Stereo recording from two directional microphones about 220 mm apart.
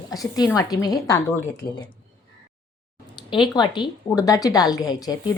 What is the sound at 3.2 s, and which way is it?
A woman's voice, 20° left (ahead or behind).